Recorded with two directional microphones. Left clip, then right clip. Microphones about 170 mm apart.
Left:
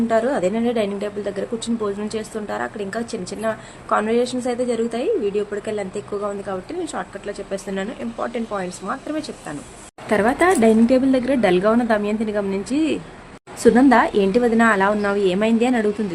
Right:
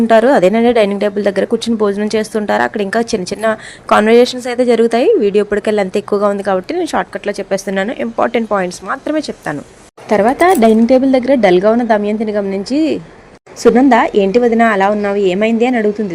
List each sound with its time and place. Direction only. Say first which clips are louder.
0.1 s speech: right 12 dB; 55° right (ahead or behind)
10.1 s a woman's voice: right 7 dB; 25° right (ahead or behind)